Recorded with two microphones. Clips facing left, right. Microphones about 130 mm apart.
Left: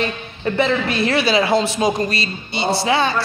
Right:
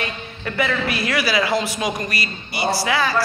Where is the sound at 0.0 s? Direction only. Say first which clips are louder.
Left 6 dB; 25° left (ahead or behind).